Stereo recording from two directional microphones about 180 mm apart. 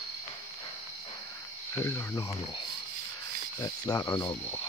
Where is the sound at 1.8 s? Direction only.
15° left (ahead or behind).